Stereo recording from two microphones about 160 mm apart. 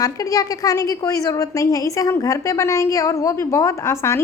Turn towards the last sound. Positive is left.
turn(degrees=15)  # may be behind; listen again after turning